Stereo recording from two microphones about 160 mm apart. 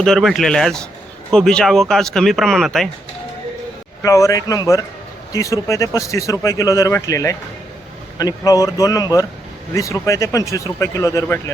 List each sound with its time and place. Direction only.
0.0 s speech: centre (ahead or behind)
4.0 s speech: 20° left (ahead or behind)